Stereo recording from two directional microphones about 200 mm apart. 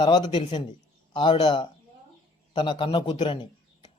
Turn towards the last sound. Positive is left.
turn(degrees=25)  # may be behind; listen again after turning